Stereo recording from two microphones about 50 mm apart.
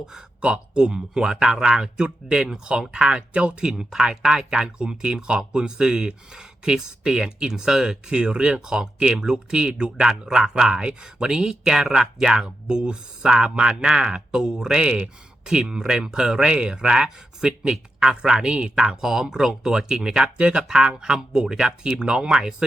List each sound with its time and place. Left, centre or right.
0.0 s speech: centre
3.7 s speech: centre